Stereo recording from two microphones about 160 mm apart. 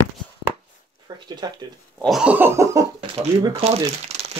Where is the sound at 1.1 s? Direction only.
30° right (ahead or behind).